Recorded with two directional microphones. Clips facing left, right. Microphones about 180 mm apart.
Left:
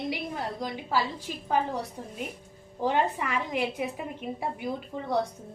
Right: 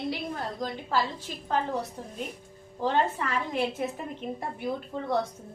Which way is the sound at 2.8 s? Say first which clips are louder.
Even; 15° left (ahead or behind).